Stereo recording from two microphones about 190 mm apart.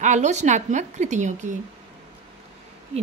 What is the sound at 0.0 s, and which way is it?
A woman's voice, 40° right (ahead or behind).